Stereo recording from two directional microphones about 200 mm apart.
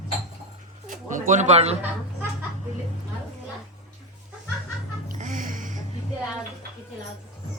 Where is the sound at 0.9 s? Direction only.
40° right (ahead or behind).